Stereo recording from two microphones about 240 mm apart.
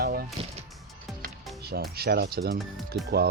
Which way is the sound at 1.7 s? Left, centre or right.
Right.